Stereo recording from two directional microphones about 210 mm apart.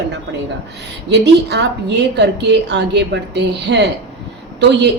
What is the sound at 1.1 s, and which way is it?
A woman's voice, 55° right (ahead or behind).